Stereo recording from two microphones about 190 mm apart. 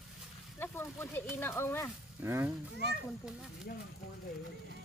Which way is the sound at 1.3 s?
10° left (ahead or behind).